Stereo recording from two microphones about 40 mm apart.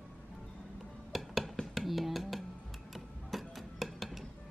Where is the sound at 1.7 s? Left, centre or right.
Centre.